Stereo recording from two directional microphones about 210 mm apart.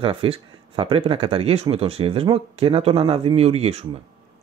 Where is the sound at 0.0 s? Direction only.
25° right (ahead or behind).